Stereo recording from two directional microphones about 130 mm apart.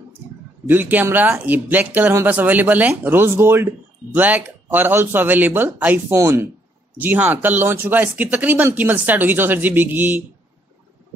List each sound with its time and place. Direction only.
0.7 s speech: 15° right (ahead or behind)